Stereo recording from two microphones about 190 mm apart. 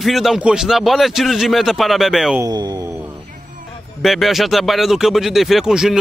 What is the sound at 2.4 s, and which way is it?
Speech, 20° right (ahead or behind).